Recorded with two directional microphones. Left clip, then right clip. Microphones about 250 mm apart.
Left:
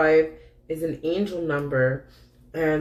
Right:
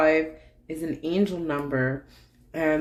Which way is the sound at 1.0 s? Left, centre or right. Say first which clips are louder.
Right 1 dB; right.